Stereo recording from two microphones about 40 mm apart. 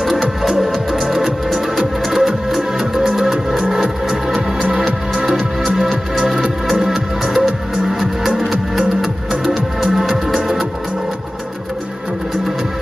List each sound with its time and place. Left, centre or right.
0.0 s music: centre
4.6 s music: right
4.8 s music: centre
9.0 s music: centre